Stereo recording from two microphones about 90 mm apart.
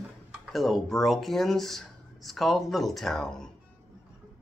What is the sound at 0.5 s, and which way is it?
Speech, centre (ahead or behind).